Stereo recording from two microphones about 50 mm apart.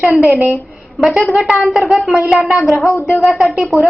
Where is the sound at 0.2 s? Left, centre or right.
Right.